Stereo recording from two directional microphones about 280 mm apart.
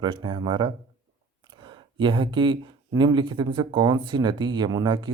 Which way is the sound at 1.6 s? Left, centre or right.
Centre.